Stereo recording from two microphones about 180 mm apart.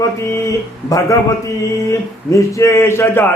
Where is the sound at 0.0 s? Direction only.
15° left (ahead or behind).